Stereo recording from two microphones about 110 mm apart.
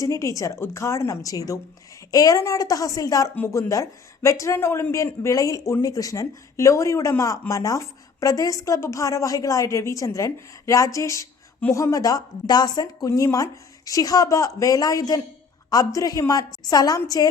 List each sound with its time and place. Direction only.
0.0 s a woman's voice: 30° left (ahead or behind)